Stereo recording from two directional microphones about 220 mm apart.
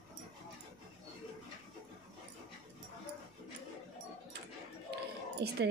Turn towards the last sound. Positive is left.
turn(degrees=-50)  # may be behind; listen again after turning